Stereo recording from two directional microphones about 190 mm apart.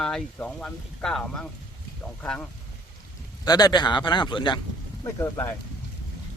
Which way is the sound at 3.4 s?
20° left (ahead or behind).